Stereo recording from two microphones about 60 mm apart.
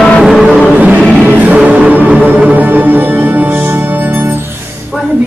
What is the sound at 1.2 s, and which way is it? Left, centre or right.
Music, right.